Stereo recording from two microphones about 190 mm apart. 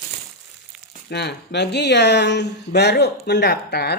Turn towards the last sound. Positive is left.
turn(degrees=55)  # may be behind; listen again after turning